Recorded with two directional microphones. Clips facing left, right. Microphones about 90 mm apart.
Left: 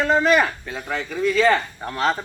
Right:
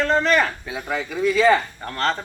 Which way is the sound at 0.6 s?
5° right (ahead or behind).